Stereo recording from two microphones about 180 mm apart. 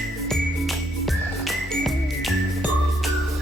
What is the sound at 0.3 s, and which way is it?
Music, centre (ahead or behind).